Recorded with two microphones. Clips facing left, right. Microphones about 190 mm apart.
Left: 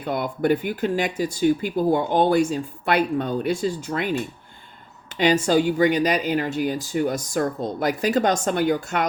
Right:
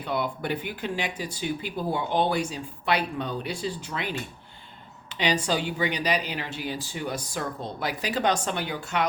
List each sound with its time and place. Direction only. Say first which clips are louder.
0.0 s speech: left 6 dB; 45° left (ahead or behind)